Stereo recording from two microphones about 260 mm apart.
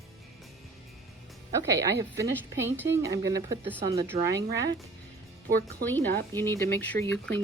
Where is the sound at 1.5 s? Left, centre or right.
Centre.